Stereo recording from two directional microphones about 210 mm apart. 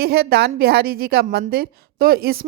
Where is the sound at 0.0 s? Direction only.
50° right (ahead or behind).